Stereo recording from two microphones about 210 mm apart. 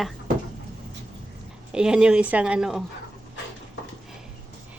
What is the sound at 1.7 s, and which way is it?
Speech, 5° right (ahead or behind).